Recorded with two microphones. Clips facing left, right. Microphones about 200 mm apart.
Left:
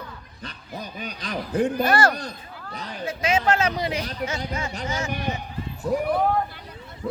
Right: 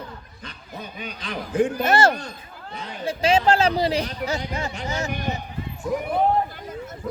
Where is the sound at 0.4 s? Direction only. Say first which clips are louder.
Left 2 dB; 40° left (ahead or behind).